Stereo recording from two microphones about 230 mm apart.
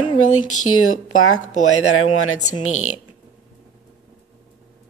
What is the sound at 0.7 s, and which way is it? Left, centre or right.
Speech, left.